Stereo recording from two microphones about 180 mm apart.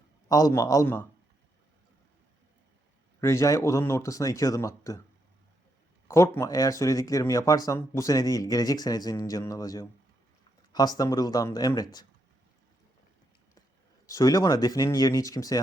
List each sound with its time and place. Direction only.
0.3 s speech: 20° left (ahead or behind)
3.2 s speech: 15° left (ahead or behind)
6.1 s speech: 15° left (ahead or behind)
14.1 s speech: 20° left (ahead or behind)